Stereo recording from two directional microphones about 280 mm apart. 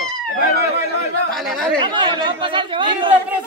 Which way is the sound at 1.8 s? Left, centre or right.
Centre.